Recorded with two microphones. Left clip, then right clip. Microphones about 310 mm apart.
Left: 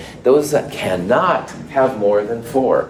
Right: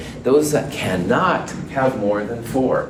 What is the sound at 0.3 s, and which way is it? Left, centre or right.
Speech, left.